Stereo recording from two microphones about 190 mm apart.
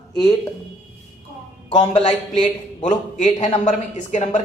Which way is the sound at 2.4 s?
40° left (ahead or behind).